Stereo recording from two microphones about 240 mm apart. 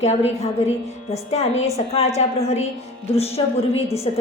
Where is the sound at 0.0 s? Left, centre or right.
Left.